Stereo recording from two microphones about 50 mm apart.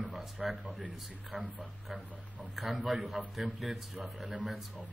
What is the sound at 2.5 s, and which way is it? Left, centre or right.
Speech, centre.